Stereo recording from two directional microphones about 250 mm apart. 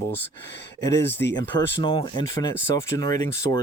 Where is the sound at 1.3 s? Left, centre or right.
Centre.